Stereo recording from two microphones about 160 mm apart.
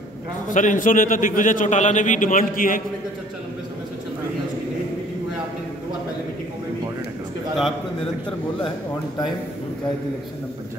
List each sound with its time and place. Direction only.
0.5 s a man's voice: 55° left (ahead or behind)